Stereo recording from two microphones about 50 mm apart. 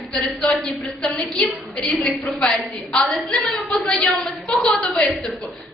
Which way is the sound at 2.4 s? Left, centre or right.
Centre.